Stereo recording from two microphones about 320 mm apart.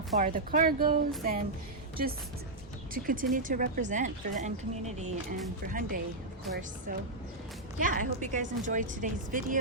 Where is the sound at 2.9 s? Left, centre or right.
Right.